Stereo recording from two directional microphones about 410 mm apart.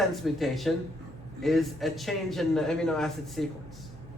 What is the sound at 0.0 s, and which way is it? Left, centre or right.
A man's voice, centre.